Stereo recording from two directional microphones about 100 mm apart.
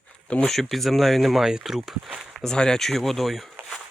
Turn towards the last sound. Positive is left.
turn(degrees=0)  # may be behind; listen again after turning